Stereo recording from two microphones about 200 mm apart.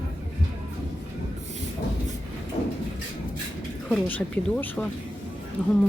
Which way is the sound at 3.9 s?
5° left (ahead or behind).